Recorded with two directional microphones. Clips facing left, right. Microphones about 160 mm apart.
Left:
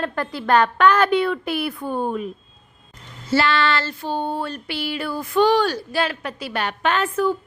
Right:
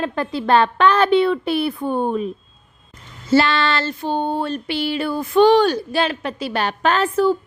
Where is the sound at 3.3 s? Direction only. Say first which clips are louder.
Right 3 dB; 25° right (ahead or behind).